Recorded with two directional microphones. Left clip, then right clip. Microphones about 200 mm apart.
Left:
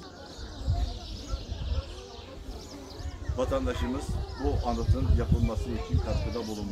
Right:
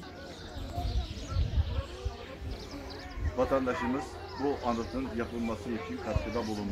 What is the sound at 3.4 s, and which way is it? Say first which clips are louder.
Speech: right 1 dB; 25° right (ahead or behind).